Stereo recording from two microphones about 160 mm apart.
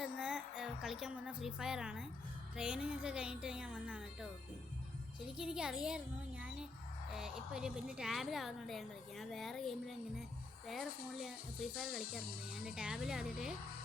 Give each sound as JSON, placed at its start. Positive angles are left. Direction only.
{"t": 0.0, "sound": "a woman's voice", "side_deg": -5}
{"t": 7.1, "sound": "a woman's voice", "side_deg": -5}
{"t": 11.7, "sound": "speech", "side_deg": 70}
{"t": 12.5, "sound": "a woman's voice", "side_deg": -5}